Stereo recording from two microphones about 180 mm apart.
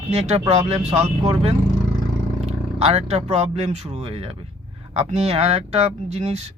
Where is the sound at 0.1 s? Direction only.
35° right (ahead or behind).